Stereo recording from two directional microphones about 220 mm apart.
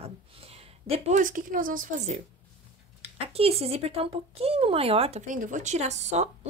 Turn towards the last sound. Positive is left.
turn(degrees=-30)  # may be behind; listen again after turning